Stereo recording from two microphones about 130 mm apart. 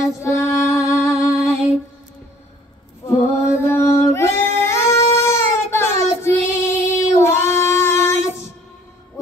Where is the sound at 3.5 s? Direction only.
20° left (ahead or behind).